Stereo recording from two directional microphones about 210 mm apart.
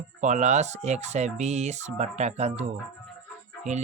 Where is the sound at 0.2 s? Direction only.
35° right (ahead or behind).